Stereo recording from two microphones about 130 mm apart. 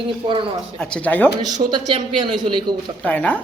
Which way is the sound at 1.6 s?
35° right (ahead or behind).